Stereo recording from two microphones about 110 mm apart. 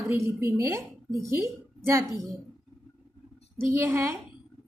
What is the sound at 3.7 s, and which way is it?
Speech, 15° right (ahead or behind).